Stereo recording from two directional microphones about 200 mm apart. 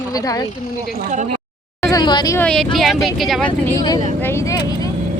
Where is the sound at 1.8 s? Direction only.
20° left (ahead or behind).